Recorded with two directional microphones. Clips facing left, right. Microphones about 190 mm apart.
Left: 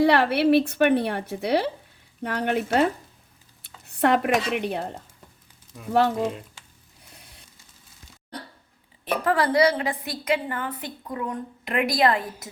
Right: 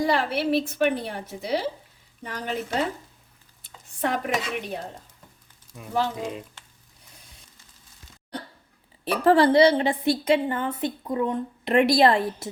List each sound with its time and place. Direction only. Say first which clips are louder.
0.0 s a woman's voice: left 5 dB; 65° left (ahead or behind)
5.9 s a woman's voice: left 5 dB; 60° left (ahead or behind)
9.2 s a woman's voice: right 4 dB; 25° right (ahead or behind)